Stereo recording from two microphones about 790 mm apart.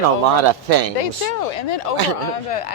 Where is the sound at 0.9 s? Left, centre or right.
Left.